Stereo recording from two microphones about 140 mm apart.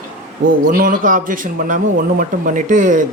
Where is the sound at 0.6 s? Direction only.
90° right; by 3.0 s 65° right (ahead or behind).